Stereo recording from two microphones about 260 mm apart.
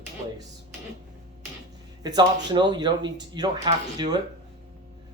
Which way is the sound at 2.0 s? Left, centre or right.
Centre.